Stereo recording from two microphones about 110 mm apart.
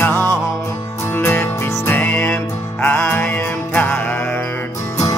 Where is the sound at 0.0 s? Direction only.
15° left (ahead or behind).